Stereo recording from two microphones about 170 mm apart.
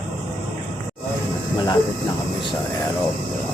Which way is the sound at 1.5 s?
25° left (ahead or behind).